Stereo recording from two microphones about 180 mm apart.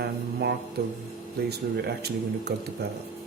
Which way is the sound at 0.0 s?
65° right (ahead or behind).